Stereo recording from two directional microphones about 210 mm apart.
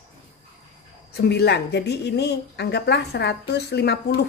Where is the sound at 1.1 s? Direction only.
50° left (ahead or behind).